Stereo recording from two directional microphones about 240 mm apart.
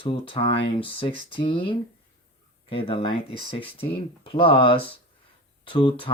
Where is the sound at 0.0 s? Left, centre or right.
Left.